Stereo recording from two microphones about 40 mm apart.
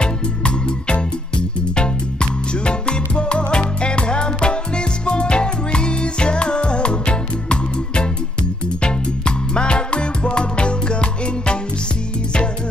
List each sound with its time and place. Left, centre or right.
0.0 s music: left